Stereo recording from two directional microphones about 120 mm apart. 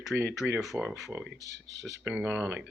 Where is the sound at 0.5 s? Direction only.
Centre (ahead or behind).